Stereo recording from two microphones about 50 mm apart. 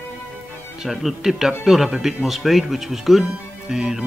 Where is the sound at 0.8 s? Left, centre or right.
Centre.